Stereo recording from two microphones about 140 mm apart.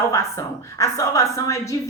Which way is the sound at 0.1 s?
20° left (ahead or behind).